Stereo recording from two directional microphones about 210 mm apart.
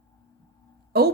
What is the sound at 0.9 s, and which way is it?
Speech, 50° right (ahead or behind).